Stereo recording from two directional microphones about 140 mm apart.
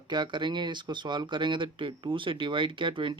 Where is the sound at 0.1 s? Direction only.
30° right (ahead or behind).